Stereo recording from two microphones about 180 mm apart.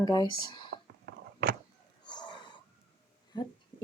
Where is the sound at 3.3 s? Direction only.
25° left (ahead or behind).